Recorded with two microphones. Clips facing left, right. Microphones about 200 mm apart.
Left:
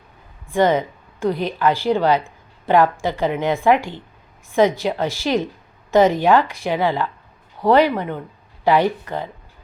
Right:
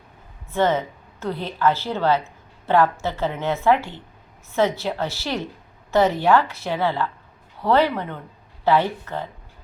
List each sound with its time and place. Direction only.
0.5 s speech: 15° left (ahead or behind)